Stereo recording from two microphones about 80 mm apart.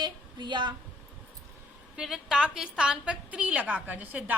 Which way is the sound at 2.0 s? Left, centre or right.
Centre.